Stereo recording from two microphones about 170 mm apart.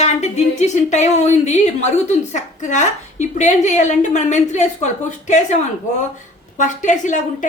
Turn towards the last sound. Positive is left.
turn(degrees=50)  # may be behind; listen again after turning